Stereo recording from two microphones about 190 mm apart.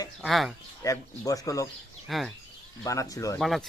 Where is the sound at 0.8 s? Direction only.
15° left (ahead or behind).